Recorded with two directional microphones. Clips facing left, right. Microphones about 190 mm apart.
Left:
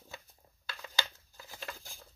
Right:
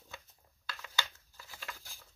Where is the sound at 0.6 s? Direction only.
25° left (ahead or behind).